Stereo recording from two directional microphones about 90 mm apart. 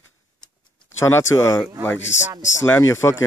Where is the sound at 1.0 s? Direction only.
30° left (ahead or behind).